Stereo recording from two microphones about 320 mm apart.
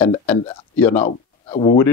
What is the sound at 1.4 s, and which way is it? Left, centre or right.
Speech, centre.